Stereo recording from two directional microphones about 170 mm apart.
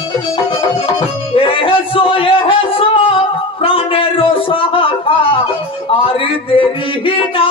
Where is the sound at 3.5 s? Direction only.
35° left (ahead or behind).